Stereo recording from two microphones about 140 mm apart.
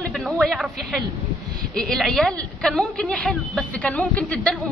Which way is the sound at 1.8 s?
5° left (ahead or behind).